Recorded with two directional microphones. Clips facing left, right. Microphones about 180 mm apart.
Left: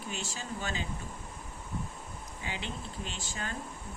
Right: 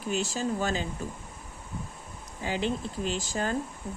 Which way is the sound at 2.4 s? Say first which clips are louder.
Right 10 dB; 40° right (ahead or behind).